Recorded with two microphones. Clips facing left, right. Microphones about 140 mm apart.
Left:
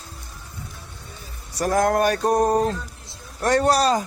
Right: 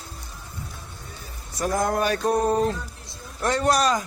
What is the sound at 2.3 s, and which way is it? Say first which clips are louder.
Speech: even; 40° left (ahead or behind).